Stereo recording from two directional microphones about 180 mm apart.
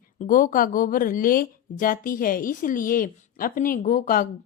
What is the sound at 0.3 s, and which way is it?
Speech, 50° left (ahead or behind).